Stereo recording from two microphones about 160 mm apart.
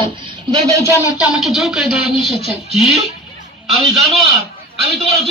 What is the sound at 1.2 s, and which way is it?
Speech, 5° right (ahead or behind).